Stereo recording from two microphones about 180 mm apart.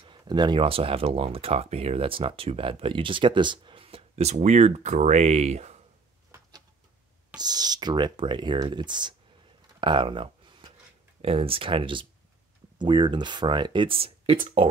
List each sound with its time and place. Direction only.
0.0 s speech: 25° right (ahead or behind)
7.3 s speech: 20° right (ahead or behind)
9.8 s a sound: 25° right (ahead or behind)
11.1 s speech: 35° right (ahead or behind)